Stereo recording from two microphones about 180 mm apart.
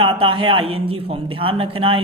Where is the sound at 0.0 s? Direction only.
30° right (ahead or behind).